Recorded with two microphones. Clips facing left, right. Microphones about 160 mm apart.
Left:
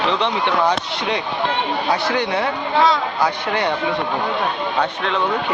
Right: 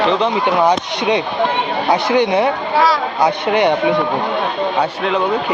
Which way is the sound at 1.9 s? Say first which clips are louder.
Right 7 dB; 20° right (ahead or behind).